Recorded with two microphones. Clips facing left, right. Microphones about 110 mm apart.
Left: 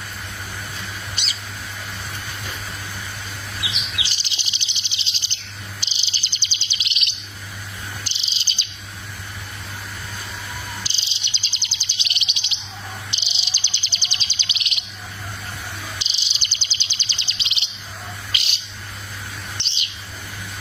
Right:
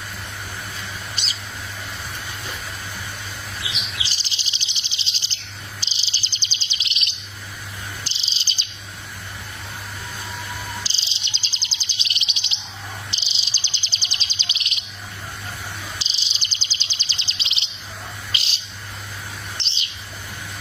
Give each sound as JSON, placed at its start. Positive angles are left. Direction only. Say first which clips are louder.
{"t": 1.1, "sound": "a sound", "louder": "even", "side_deg": -35}
{"t": 4.0, "sound": "bird vocalization", "louder": "even", "side_deg": -35}
{"t": 5.8, "sound": "cricket", "louder": "even", "side_deg": -35}
{"t": 8.0, "sound": "bird", "louder": "even", "side_deg": -35}
{"t": 10.8, "sound": "bird vocalization", "louder": "even", "side_deg": -35}
{"t": 13.1, "sound": "bird", "louder": "left 1 dB", "side_deg": -35}
{"t": 16.0, "sound": "bird vocalization", "louder": "even", "side_deg": -35}
{"t": 18.3, "sound": "bird", "louder": "even", "side_deg": -30}